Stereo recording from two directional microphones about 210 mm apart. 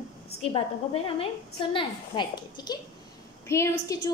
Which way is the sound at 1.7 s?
25° left (ahead or behind).